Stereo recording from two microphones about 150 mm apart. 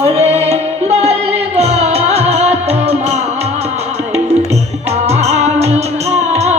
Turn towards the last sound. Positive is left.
turn(degrees=-50)  # may be behind; listen again after turning